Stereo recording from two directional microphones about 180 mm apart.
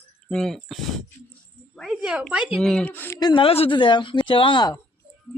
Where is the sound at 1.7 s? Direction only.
Centre (ahead or behind).